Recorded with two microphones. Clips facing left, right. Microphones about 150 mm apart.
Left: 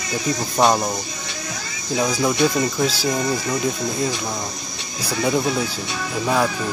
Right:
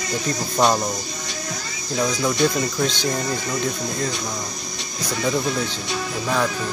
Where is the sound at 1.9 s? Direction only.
10° left (ahead or behind).